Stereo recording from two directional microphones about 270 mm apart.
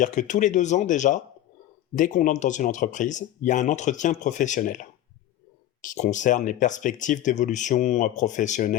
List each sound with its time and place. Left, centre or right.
0.0 s speech: left